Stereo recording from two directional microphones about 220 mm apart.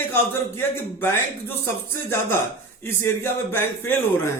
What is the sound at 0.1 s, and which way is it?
A man's voice, 10° left (ahead or behind).